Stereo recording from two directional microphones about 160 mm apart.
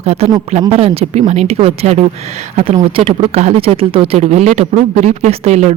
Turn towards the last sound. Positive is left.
turn(degrees=-45)  # may be behind; listen again after turning